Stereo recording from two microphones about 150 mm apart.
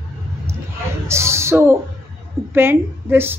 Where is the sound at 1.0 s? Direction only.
20° right (ahead or behind).